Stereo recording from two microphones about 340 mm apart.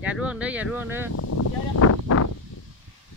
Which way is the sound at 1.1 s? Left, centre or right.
Left.